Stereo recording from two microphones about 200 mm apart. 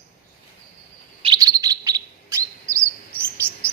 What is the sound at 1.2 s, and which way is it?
Chirp, 20° right (ahead or behind).